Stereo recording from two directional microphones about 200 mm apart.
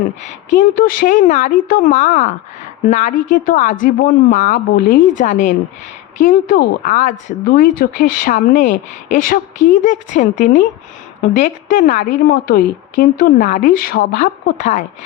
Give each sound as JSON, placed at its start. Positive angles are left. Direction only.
{"t": 0.6, "sound": "a woman's voice", "side_deg": 45}